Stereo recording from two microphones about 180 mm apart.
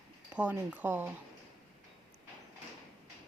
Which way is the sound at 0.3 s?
10° right (ahead or behind).